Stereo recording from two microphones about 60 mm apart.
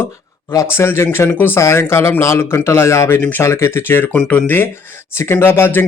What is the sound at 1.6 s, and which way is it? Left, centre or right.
Speech, left.